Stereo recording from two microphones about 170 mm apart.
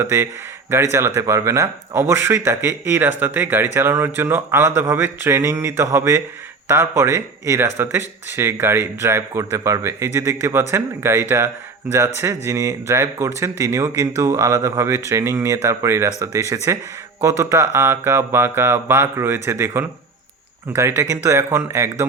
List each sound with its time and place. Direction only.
0.0 s speech: 15° right (ahead or behind)